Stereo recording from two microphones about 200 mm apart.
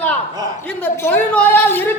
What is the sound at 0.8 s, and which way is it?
Speech, 10° left (ahead or behind).